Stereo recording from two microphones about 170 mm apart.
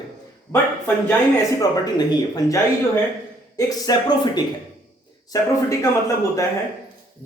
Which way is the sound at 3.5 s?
20° left (ahead or behind).